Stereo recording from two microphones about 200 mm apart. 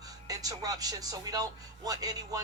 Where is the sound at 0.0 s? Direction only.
20° right (ahead or behind).